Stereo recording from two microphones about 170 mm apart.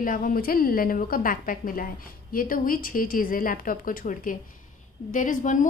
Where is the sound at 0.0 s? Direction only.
55° left (ahead or behind).